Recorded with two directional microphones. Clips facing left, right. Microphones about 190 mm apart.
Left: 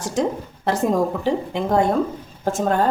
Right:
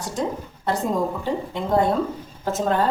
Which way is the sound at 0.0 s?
90° left.